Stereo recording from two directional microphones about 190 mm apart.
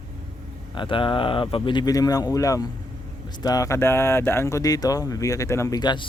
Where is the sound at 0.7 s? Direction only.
25° left (ahead or behind).